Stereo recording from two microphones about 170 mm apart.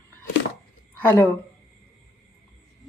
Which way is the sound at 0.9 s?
10° left (ahead or behind).